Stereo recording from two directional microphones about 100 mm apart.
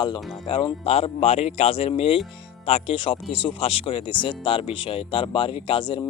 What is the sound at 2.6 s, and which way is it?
Speech, 85° left.